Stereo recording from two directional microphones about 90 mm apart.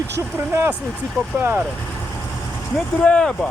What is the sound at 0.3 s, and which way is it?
Speech, 25° right (ahead or behind).